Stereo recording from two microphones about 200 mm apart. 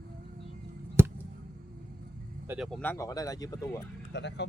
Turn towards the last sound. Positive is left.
turn(degrees=60)  # may be behind; listen again after turning